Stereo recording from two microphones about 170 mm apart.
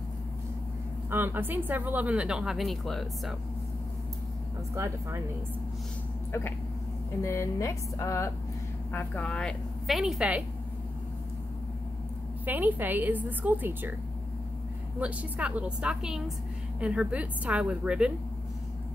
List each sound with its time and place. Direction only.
1.1 s speech: 10° right (ahead or behind)
4.7 s speech: 15° right (ahead or behind)
7.2 s a woman's voice: 15° left (ahead or behind); by 10.4 s 5° right (ahead or behind)
12.4 s speech: 10° right (ahead or behind)
15.0 s a woman's voice: 5° right (ahead or behind)